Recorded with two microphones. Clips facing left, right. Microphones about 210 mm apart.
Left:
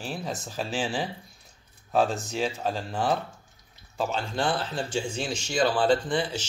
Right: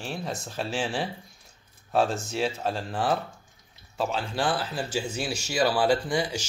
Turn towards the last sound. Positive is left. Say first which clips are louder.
# left 1 dB
turn(degrees=-10)  # may be behind; listen again after turning